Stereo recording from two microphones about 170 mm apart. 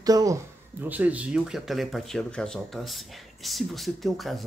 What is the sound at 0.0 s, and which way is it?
Speech, 20° right (ahead or behind).